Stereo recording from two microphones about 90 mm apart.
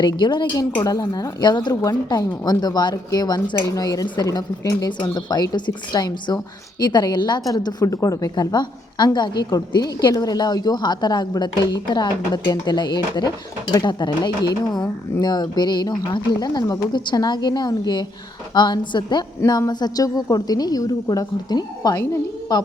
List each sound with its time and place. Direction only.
0.0 s a woman's voice: 55° left (ahead or behind)
0.8 s a woman's voice: 45° left (ahead or behind)
19.5 s a woman's voice: 45° left (ahead or behind)